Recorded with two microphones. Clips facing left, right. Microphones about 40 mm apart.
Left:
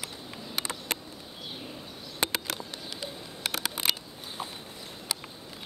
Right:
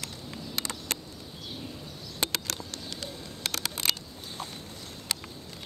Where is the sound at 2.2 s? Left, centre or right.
Left.